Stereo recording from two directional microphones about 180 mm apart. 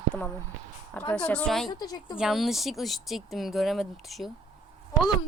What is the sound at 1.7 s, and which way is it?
Speech, 20° left (ahead or behind).